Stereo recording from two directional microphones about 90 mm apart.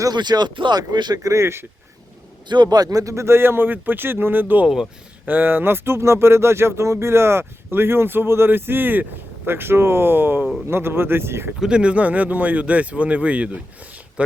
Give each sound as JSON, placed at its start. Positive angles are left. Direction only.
{"t": 0.0, "sound": "speech", "side_deg": -50}
{"t": 2.5, "sound": "speech", "side_deg": -50}
{"t": 4.7, "sound": "speech", "side_deg": -5}
{"t": 5.3, "sound": "speech", "side_deg": -20}
{"t": 11.6, "sound": "speech", "side_deg": -10}